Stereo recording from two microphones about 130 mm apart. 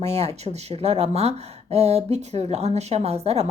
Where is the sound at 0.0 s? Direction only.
55° right (ahead or behind).